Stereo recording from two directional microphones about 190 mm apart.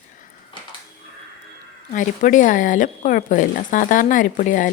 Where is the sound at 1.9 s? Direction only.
40° left (ahead or behind).